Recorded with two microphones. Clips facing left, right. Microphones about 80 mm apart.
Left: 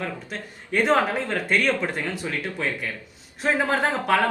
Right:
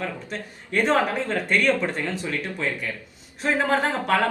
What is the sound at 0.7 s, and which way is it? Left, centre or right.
Speech, centre.